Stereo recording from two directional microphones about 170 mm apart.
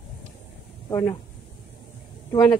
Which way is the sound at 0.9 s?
20° left (ahead or behind).